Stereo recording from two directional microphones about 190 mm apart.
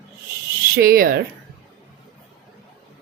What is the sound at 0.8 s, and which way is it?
Speech, 50° right (ahead or behind).